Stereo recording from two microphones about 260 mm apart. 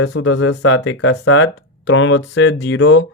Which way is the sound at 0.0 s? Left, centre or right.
Left.